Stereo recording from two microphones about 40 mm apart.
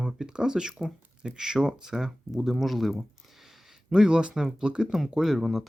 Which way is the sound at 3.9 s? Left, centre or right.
Right.